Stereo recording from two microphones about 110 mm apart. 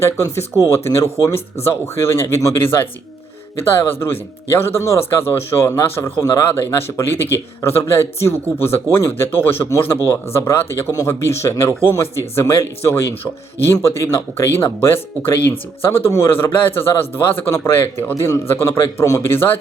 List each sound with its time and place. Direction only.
0.0 s a man's voice: 25° left (ahead or behind)
16.0 s a man's voice: 25° left (ahead or behind)